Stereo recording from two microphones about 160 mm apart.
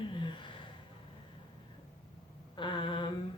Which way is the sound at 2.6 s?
30° left (ahead or behind).